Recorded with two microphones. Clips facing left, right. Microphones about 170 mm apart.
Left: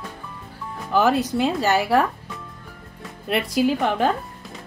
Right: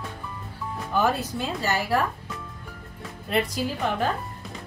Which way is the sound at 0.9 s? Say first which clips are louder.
Left 6 dB; 80° left.